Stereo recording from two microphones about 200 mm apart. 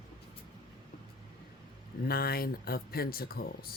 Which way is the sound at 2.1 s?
50° left (ahead or behind).